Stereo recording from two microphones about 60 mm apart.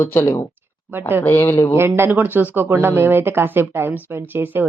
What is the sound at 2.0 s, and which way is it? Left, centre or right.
Speech, right.